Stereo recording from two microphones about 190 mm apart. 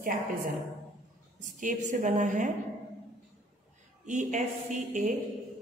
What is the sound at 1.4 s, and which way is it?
A woman's voice, 40° right (ahead or behind).